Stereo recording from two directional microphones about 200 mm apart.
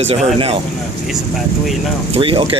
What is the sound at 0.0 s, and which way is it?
Speech, 30° right (ahead or behind).